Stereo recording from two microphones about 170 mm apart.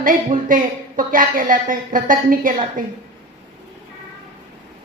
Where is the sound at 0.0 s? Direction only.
55° right (ahead or behind).